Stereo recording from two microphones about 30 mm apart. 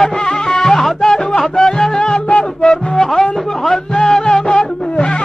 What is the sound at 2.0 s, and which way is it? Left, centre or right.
Music, left.